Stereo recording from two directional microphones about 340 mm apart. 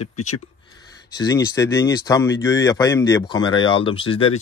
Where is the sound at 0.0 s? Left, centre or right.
Left.